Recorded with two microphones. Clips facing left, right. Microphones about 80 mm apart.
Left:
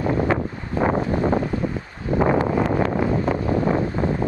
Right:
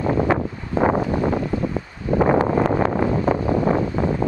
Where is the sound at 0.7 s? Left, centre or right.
Right.